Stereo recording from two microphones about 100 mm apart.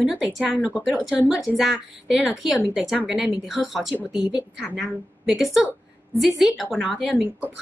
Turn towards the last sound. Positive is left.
turn(degrees=-5)  # may be behind; listen again after turning